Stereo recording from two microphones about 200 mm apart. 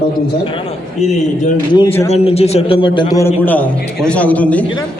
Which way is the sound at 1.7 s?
25° left (ahead or behind).